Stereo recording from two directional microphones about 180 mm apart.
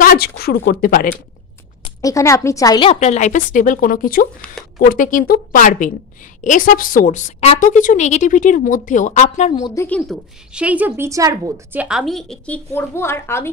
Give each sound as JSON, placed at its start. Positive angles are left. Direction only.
{"t": 0.0, "sound": "a woman's voice", "side_deg": 55}
{"t": 2.0, "sound": "a woman's voice", "side_deg": 20}
{"t": 2.9, "sound": "a woman's voice", "side_deg": 40}
{"t": 9.6, "sound": "a woman's voice", "side_deg": 25}
{"t": 9.8, "sound": "a woman's voice", "side_deg": 5}
{"t": 10.5, "sound": "a woman's voice", "side_deg": -5}